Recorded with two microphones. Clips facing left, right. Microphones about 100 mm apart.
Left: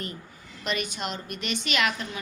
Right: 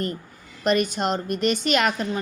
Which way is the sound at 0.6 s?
45° right (ahead or behind).